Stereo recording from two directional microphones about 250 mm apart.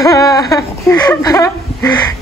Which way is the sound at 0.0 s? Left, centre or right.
Centre.